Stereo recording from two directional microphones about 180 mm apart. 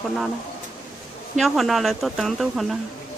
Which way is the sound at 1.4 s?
Centre (ahead or behind).